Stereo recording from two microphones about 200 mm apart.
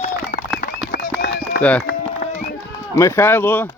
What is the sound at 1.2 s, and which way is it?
Run, 55° left (ahead or behind).